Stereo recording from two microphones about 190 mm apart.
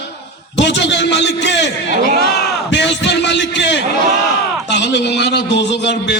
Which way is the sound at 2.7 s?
70° left (ahead or behind).